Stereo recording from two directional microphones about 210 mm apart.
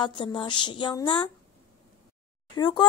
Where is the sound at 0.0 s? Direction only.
20° left (ahead or behind).